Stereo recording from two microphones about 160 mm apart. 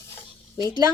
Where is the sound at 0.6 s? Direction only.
25° right (ahead or behind).